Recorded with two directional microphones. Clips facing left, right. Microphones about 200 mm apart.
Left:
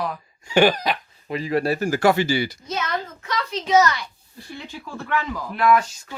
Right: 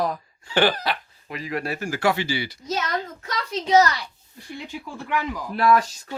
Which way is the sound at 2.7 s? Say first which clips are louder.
Even; 35° right (ahead or behind).